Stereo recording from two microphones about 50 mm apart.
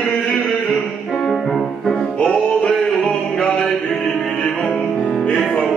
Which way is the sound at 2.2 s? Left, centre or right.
Centre.